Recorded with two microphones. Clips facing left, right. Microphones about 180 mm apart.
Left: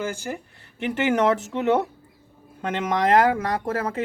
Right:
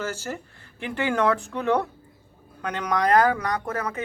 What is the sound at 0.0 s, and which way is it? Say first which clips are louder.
Speech: left 2 dB; 15° left (ahead or behind).